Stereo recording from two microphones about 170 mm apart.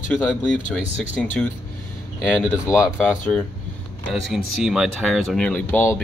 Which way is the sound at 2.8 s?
10° left (ahead or behind).